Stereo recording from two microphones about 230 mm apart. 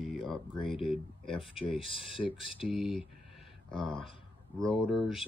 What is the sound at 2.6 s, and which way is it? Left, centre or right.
Speech, centre.